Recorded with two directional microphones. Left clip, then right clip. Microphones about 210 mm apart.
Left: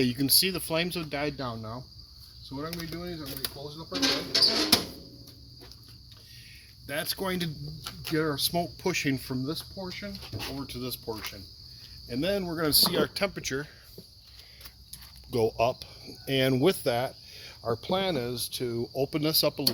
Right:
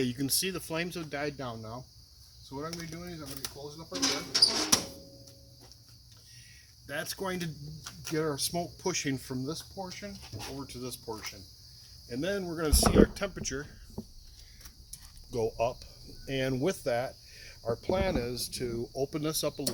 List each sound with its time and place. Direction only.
0.0 s speech: 15° left (ahead or behind)
2.6 s speech: centre (ahead or behind)
6.8 s speech: 15° left (ahead or behind)
12.9 s cricket: 25° left (ahead or behind)
15.3 s speech: 35° left (ahead or behind); by 18.3 s 15° left (ahead or behind)
18.5 s cricket: 15° left (ahead or behind)